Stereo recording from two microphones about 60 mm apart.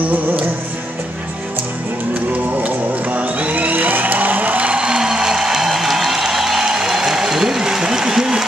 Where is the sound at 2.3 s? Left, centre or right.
Right.